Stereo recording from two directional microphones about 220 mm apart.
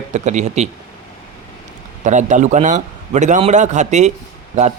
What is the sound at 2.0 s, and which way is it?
Speech, 35° right (ahead or behind).